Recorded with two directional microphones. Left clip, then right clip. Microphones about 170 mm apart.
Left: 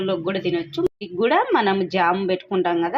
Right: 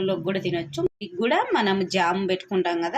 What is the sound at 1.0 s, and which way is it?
Speech, 20° left (ahead or behind).